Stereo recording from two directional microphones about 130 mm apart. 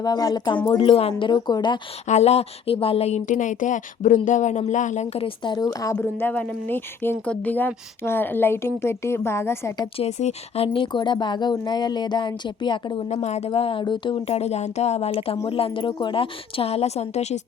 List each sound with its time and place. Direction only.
0.0 s speech: 30° left (ahead or behind)
1.3 s speech: 35° left (ahead or behind)
2.0 s a woman's voice: 60° left (ahead or behind)
3.2 s speech: 75° left (ahead or behind)
5.2 s a woman's voice: 35° left (ahead or behind)
6.0 s speech: 15° left (ahead or behind)
10.0 s speech: 60° left (ahead or behind); by 13.1 s 35° left (ahead or behind)
13.2 s a woman's voice: 55° left (ahead or behind); by 14.2 s 40° left (ahead or behind)
14.3 s a woman's voice: 55° left (ahead or behind)